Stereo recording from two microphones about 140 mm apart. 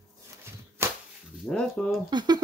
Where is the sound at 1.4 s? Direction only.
5° left (ahead or behind).